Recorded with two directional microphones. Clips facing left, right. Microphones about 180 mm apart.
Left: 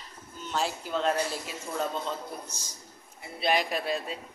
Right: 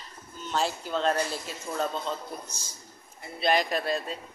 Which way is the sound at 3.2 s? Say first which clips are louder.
Right 2 dB; 10° left (ahead or behind).